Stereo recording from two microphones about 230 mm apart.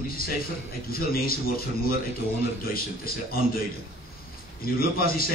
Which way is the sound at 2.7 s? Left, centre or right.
Left.